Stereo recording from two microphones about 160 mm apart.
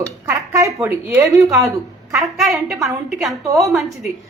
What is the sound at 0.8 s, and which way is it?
Speech, 15° right (ahead or behind).